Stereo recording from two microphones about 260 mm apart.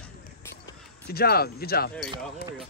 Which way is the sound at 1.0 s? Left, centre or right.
Left.